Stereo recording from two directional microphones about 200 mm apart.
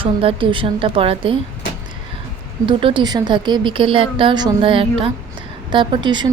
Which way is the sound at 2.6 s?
25° right (ahead or behind).